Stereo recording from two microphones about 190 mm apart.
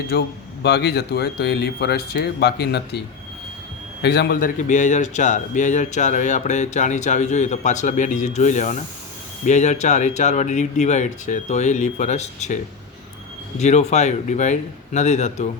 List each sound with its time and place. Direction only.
0.1 s speech: 60° left (ahead or behind)
4.0 s a man's voice: 60° left (ahead or behind); by 12.5 s 35° left (ahead or behind)
13.6 s a man's voice: 35° left (ahead or behind)